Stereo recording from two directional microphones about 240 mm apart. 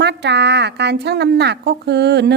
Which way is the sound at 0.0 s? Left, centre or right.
Right.